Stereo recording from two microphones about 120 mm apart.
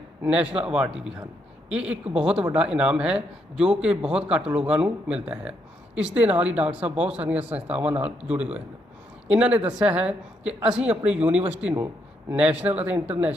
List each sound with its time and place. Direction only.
0.2 s a man's voice: 10° right (ahead or behind)